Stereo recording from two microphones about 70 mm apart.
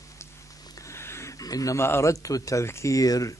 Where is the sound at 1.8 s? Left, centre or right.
Left.